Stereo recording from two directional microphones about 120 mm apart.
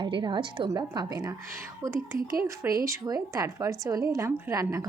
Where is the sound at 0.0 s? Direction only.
40° right (ahead or behind).